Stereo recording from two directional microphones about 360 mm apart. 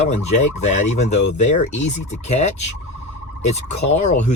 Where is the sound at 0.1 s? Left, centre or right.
Centre.